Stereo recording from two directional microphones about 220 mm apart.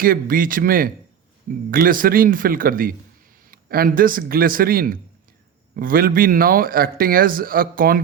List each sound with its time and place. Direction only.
0.0 s speech: 40° right (ahead or behind)